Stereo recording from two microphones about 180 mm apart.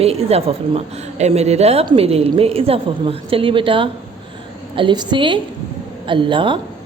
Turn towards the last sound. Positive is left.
turn(degrees=-25)  # may be behind; listen again after turning